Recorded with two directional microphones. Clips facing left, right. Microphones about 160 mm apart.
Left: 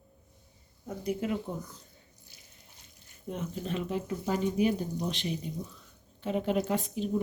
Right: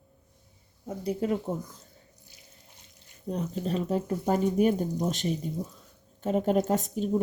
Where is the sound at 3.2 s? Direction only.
35° right (ahead or behind).